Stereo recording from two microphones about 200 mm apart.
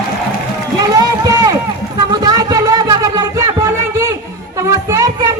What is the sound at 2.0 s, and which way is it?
Music, 20° right (ahead or behind).